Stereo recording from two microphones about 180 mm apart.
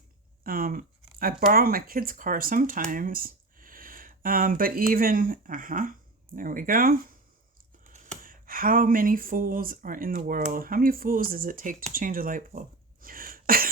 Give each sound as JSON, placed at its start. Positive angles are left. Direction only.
{"t": 0.4, "sound": "speech", "side_deg": -50}
{"t": 8.2, "sound": "speech", "side_deg": -50}